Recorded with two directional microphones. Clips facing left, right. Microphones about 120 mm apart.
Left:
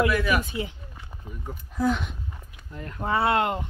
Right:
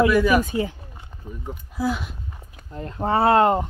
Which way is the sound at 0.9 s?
20° right (ahead or behind).